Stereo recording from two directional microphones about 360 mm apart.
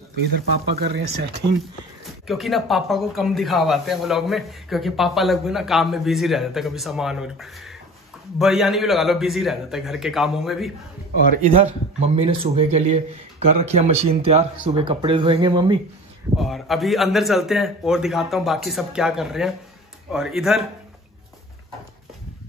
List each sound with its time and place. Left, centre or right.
0.1 s speech: right
2.2 s speech: centre
11.4 s a man's voice: centre
16.3 s speech: centre